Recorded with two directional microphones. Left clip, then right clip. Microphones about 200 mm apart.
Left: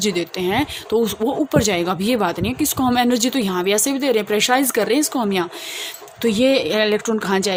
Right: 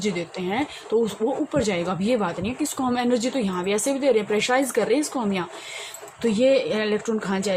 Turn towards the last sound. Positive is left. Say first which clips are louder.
# left 5 dB
turn(degrees=50)  # may be behind; listen again after turning